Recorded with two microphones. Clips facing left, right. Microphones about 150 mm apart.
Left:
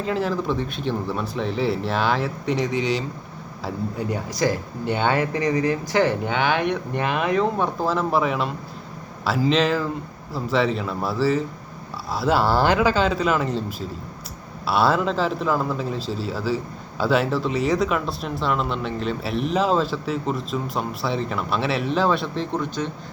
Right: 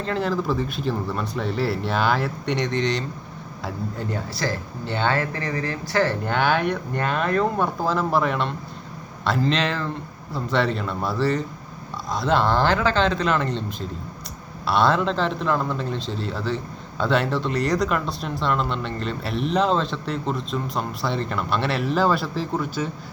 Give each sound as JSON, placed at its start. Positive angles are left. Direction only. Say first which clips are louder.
{"t": 0.0, "sound": "speech", "louder": "left 1 dB", "side_deg": 5}
{"t": 6.2, "sound": "speech", "louder": "even", "side_deg": 0}